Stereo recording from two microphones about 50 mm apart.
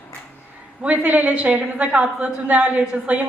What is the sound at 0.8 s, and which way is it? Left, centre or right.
A woman's voice, right.